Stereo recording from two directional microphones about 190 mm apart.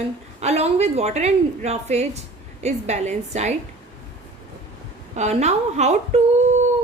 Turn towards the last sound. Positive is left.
turn(degrees=-35)  # may be behind; listen again after turning